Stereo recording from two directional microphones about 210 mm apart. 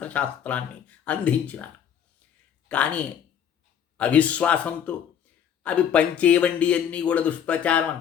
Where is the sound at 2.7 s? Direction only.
5° left (ahead or behind).